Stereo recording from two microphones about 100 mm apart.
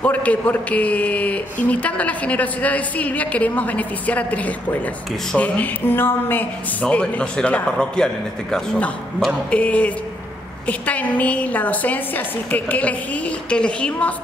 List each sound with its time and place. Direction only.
0.0 s a man's voice: 15° left (ahead or behind)